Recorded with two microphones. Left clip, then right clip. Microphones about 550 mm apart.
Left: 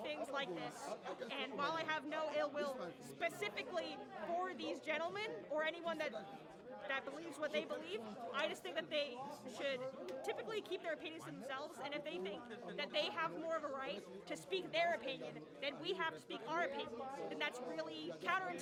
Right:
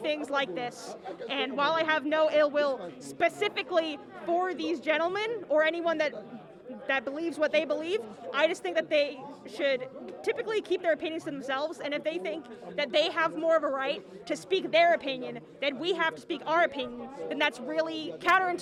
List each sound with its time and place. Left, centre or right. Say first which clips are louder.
0.0 s a sound: right 13 dB; right
1.3 s a man's voice: right 15 dB; right
4.4 s a woman's voice: right 14 dB; right